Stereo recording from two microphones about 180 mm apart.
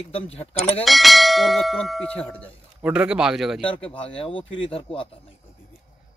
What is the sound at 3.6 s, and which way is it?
Speech, 30° left (ahead or behind).